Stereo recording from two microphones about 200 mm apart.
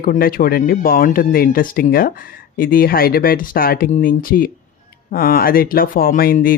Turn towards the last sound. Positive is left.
turn(degrees=45)  # may be behind; listen again after turning